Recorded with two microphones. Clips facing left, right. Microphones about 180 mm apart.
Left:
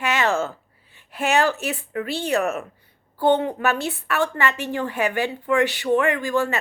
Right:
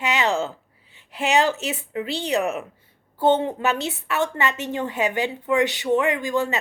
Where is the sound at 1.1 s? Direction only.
20° right (ahead or behind).